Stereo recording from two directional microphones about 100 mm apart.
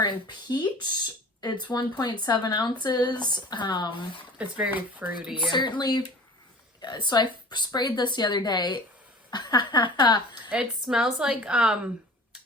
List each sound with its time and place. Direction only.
0.0 s speech: 45° left (ahead or behind)
4.4 s speech: 10° right (ahead or behind)
5.3 s speech: 50° left (ahead or behind)
10.5 s speech: 10° right (ahead or behind)